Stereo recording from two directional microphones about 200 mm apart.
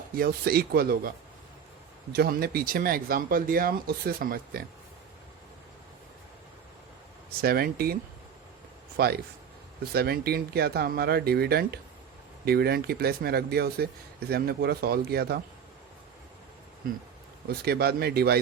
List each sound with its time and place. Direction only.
0.2 s speech: 50° right (ahead or behind)
2.1 s speech: 50° right (ahead or behind)
7.4 s speech: 50° right (ahead or behind)
9.0 s speech: 50° right (ahead or behind)
17.5 s speech: 50° right (ahead or behind)